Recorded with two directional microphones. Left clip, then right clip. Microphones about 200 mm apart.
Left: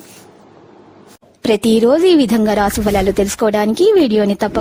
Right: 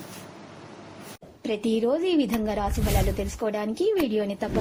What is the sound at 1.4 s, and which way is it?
Speech, 65° left (ahead or behind).